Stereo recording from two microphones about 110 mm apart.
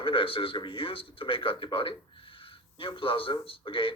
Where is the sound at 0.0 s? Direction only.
55° left (ahead or behind).